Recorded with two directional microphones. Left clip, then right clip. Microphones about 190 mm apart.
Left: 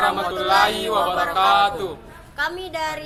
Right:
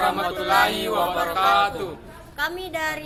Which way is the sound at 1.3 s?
15° left (ahead or behind).